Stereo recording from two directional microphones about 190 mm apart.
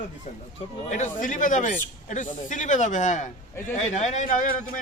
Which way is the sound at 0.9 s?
40° left (ahead or behind).